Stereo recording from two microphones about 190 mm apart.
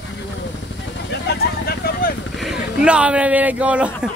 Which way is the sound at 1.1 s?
60° left (ahead or behind).